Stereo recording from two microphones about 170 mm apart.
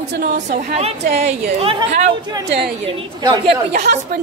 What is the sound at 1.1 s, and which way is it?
Speech, 35° right (ahead or behind).